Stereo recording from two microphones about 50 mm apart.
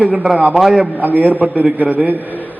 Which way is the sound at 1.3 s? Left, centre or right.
Right.